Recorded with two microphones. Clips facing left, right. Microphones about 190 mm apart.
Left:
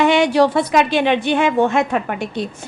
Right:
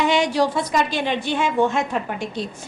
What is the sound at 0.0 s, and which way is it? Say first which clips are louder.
A woman's voice: left 5 dB; 60° left (ahead or behind).